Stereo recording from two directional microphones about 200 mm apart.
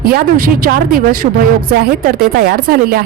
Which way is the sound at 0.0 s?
45° right (ahead or behind).